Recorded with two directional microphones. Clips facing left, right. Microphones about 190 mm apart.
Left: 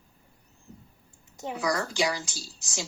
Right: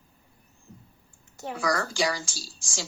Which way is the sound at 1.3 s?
20° left (ahead or behind).